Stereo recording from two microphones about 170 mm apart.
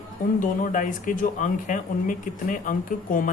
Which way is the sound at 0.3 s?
50° left (ahead or behind).